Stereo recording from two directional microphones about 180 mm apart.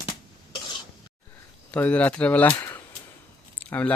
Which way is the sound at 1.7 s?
10° left (ahead or behind).